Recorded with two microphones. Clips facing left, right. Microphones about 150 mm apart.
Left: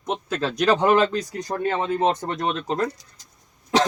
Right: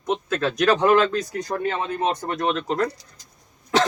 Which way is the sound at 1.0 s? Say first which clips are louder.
Even; 15° left (ahead or behind).